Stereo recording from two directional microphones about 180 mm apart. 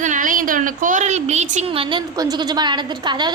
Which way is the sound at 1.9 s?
20° right (ahead or behind).